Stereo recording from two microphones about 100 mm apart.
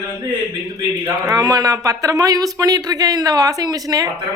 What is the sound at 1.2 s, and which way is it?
Speech, 40° right (ahead or behind).